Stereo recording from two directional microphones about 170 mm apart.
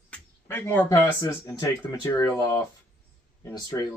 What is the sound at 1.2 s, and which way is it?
Speech, 20° left (ahead or behind).